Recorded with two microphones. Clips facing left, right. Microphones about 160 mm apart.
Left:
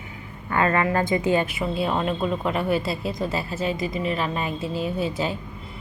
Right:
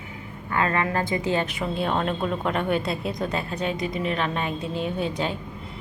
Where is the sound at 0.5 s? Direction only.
30° left (ahead or behind).